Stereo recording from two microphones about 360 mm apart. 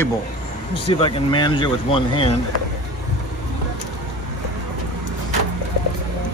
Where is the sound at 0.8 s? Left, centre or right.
Centre.